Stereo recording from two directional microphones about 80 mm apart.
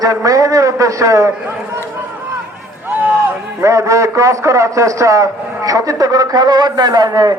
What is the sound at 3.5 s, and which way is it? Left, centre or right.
A man's voice, right.